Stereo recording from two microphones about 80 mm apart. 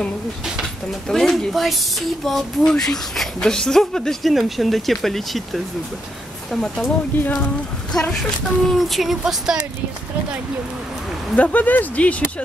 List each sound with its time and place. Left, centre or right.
1.0 s speech: centre
7.9 s speech: centre
11.3 s speech: centre